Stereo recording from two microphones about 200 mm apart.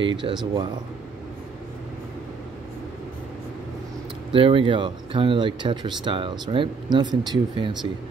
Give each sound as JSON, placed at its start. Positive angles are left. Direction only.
{"t": 0.0, "sound": "speech", "side_deg": -25}
{"t": 4.3, "sound": "speech", "side_deg": -25}